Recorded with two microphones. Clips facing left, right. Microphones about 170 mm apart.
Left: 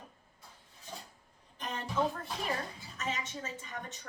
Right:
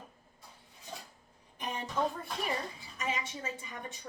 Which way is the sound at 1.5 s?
10° right (ahead or behind).